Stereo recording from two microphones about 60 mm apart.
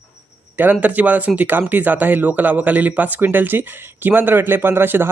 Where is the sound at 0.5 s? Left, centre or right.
Right.